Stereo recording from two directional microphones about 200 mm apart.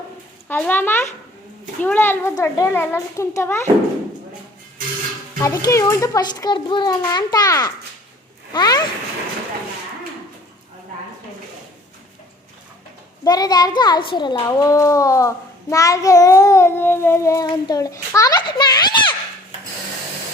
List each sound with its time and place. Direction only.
0.4 s a child's voice: 10° left (ahead or behind)
5.4 s a child's voice: 15° left (ahead or behind)
13.2 s a child's voice: 20° left (ahead or behind)